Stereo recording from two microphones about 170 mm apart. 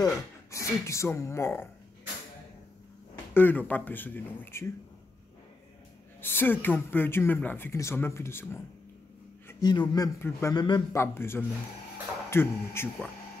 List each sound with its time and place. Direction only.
0.0 s speech: 20° left (ahead or behind)
3.3 s speech: 10° left (ahead or behind)
6.2 s a man's voice: 10° left (ahead or behind)